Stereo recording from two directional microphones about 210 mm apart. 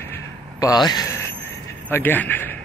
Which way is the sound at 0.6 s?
20° left (ahead or behind).